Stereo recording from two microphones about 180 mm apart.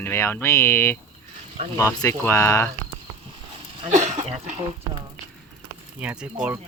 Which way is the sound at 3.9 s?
40° right (ahead or behind).